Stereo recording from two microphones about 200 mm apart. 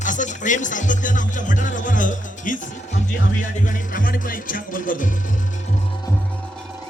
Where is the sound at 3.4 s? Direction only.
40° left (ahead or behind).